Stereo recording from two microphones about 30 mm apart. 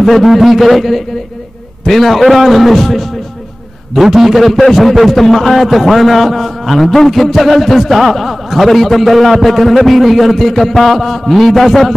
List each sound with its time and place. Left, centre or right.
0.0 s a man's voice: centre